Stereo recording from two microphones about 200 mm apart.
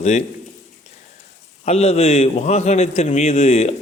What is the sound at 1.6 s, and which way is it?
A man's voice, 30° left (ahead or behind).